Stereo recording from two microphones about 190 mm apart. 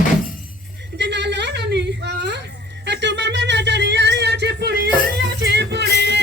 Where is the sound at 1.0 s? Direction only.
65° right (ahead or behind).